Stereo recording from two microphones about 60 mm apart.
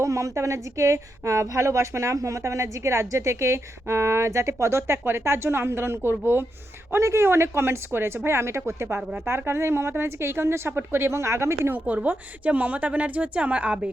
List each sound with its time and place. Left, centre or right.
0.0 s a woman's voice: right
12.0 s a woman's voice: right